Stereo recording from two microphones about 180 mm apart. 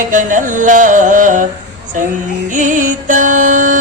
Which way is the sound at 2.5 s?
45° right (ahead or behind).